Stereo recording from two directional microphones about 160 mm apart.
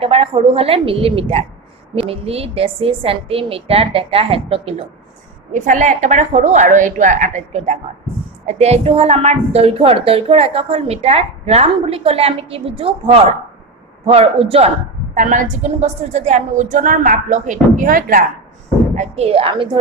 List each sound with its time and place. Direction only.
0.0 s a woman's voice: 35° right (ahead or behind)
5.5 s a woman's voice: 50° right (ahead or behind)
15.1 s a woman's voice: 50° right (ahead or behind)
18.9 s a woman's voice: 45° right (ahead or behind)